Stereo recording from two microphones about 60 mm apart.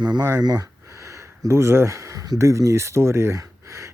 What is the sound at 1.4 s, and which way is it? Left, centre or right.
Speech, right.